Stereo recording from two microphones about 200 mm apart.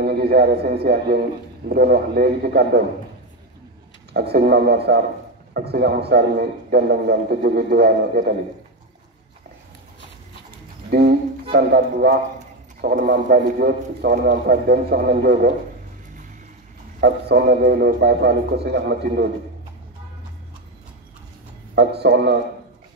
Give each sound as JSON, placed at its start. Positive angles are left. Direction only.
{"t": 0.0, "sound": "a man's voice", "side_deg": -55}
{"t": 4.1, "sound": "a man's voice", "side_deg": -55}
{"t": 10.9, "sound": "a man's voice", "side_deg": -55}
{"t": 12.4, "sound": "a sound", "side_deg": -40}
{"t": 13.1, "sound": "a man's voice", "side_deg": -55}
{"t": 17.0, "sound": "a man's voice", "side_deg": -50}
{"t": 21.7, "sound": "speech", "side_deg": -55}